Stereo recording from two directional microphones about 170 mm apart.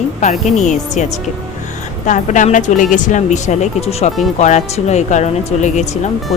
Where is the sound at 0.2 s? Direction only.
45° left (ahead or behind).